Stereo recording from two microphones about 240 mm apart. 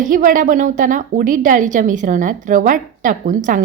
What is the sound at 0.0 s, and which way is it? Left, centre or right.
A woman's voice, right.